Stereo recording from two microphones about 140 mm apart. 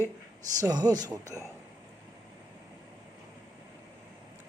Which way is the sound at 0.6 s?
25° right (ahead or behind).